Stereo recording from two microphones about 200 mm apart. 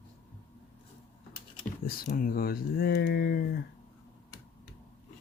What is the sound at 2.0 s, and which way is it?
Speech, 45° left (ahead or behind).